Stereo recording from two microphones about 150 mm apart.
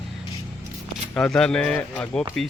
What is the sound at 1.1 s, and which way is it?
Speech, 5° left (ahead or behind).